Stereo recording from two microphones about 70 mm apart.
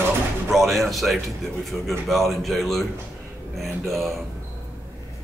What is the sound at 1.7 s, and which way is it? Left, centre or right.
Speech, left.